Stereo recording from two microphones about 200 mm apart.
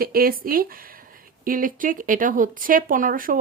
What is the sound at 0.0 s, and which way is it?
A woman's voice, 50° right (ahead or behind).